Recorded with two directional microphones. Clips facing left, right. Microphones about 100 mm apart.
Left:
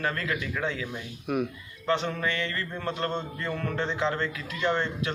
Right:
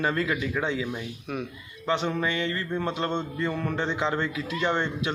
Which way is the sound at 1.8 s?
15° right (ahead or behind).